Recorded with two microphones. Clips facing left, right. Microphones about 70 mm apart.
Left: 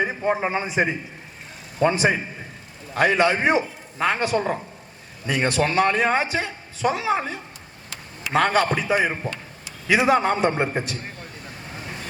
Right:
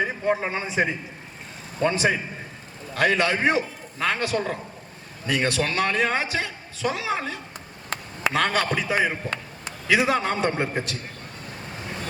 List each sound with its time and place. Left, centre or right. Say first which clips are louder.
0.0 s a man's voice: left 1 dB; left
7.9 s a sound: right 8 dB; right
8.3 s a man's voice: left 4 dB; left